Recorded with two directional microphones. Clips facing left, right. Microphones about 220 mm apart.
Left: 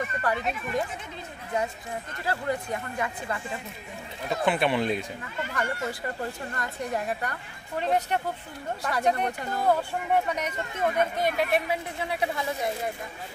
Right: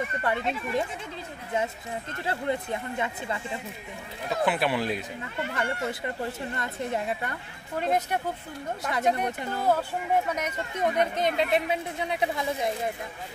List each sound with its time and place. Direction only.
0.2 s speech: 25° right (ahead or behind)
2.2 s speech: 25° right (ahead or behind)
4.3 s speech: centre (ahead or behind)
5.5 s speech: 25° right (ahead or behind)
7.8 s speech: 10° right (ahead or behind)